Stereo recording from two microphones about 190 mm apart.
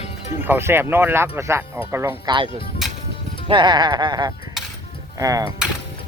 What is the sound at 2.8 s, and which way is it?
Music, centre (ahead or behind).